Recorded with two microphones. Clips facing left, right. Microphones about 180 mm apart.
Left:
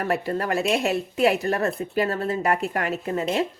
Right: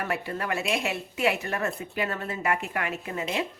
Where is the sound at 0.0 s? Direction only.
40° left (ahead or behind).